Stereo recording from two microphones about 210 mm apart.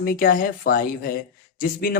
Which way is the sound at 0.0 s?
45° left (ahead or behind).